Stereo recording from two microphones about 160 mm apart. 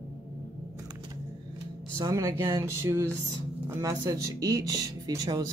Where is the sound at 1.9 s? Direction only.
20° right (ahead or behind).